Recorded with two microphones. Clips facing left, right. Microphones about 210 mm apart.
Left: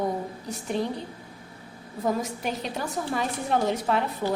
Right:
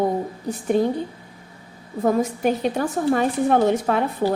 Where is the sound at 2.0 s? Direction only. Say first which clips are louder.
Right 8 dB; 50° right (ahead or behind).